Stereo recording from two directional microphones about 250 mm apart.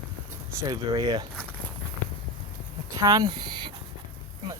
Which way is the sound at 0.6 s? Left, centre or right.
Centre.